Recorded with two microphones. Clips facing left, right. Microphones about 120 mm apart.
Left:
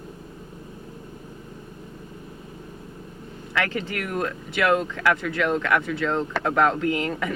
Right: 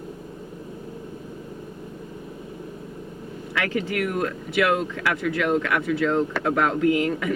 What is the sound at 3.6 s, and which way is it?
Speech, 35° left (ahead or behind).